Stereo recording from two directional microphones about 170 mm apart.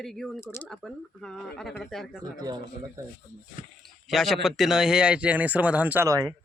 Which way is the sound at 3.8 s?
Centre (ahead or behind).